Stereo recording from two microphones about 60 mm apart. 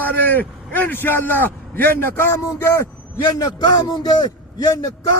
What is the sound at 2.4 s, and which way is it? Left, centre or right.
Speech, left.